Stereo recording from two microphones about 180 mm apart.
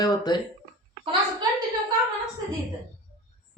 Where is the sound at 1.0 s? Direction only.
30° right (ahead or behind).